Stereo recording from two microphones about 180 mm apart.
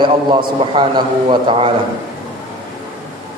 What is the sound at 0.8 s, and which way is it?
Speech, 25° right (ahead or behind).